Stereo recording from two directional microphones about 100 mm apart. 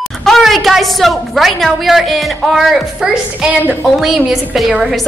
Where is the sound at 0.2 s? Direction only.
Centre (ahead or behind).